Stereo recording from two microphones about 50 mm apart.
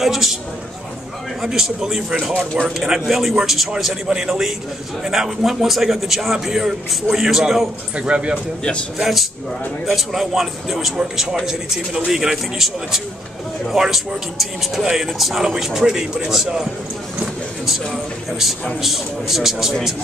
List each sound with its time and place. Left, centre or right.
0.0 s speech: centre
1.4 s a man's voice: centre
8.0 s a man's voice: right
8.9 s a man's voice: centre
17.6 s a man's voice: centre